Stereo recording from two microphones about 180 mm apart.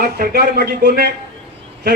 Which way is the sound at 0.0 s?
60° right (ahead or behind).